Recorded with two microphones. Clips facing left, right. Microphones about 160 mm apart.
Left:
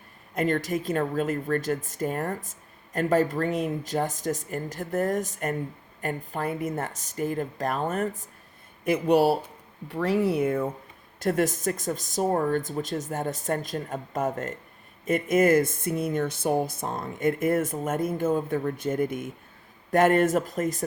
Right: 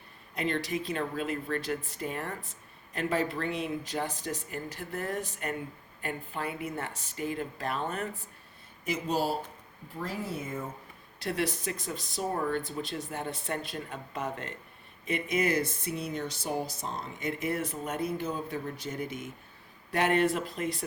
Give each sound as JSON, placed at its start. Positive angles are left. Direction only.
{"t": 0.3, "sound": "speech", "side_deg": 45}
{"t": 8.8, "sound": "speech", "side_deg": 60}
{"t": 11.2, "sound": "speech", "side_deg": 45}